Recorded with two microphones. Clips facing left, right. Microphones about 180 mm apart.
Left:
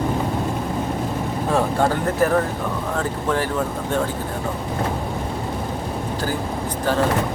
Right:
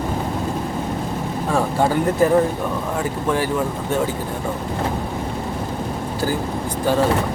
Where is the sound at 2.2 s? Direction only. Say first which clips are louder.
Right 3 dB; 15° right (ahead or behind).